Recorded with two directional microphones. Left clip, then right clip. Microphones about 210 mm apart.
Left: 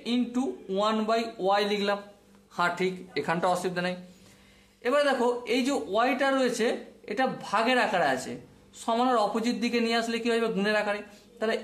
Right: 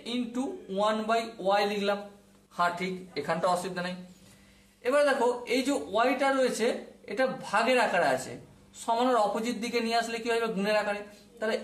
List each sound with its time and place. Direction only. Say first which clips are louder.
0.0 s speech: left 4 dB; 35° left (ahead or behind)